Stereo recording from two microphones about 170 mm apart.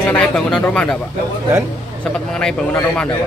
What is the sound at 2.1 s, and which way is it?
A man's voice, 5° left (ahead or behind).